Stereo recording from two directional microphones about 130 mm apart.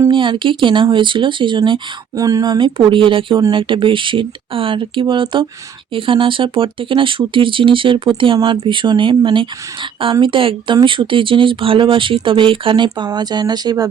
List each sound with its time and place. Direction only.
0.1 s speech: 40° right (ahead or behind)